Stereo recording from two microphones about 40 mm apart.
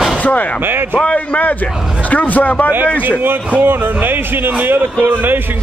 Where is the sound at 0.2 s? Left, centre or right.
Left.